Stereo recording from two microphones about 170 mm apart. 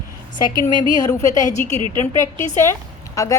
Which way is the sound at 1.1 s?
20° left (ahead or behind).